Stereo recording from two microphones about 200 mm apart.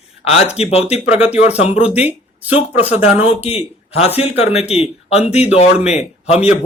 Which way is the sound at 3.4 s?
30° left (ahead or behind).